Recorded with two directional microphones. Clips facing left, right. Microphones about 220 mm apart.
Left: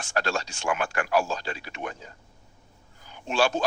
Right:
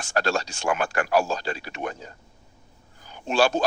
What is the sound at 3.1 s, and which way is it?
Speech, 40° right (ahead or behind).